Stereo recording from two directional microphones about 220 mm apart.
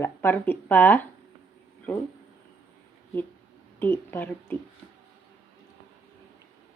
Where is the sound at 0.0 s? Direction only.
10° left (ahead or behind).